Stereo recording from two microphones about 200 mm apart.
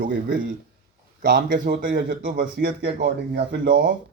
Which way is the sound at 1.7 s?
60° right (ahead or behind).